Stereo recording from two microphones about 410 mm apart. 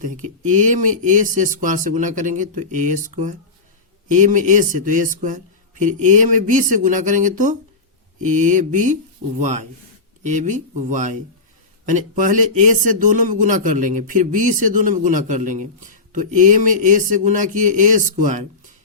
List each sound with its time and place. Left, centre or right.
0.0 s a man's voice: centre
10.2 s a man's voice: centre